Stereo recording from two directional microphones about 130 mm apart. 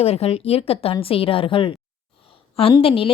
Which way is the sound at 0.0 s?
50° left (ahead or behind).